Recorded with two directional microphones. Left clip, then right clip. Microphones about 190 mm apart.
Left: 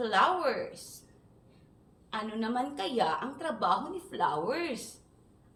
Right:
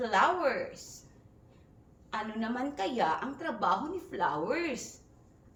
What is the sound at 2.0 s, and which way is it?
A woman's voice, 20° left (ahead or behind).